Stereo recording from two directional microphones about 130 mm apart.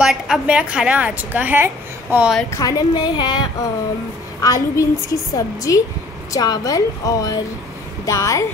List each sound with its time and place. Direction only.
0.0 s a woman's voice: 5° right (ahead or behind)
2.5 s a woman's voice: 30° left (ahead or behind)